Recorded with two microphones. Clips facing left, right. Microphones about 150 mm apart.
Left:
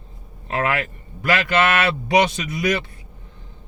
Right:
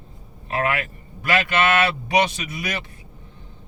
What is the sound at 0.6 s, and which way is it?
Speech, 35° left (ahead or behind).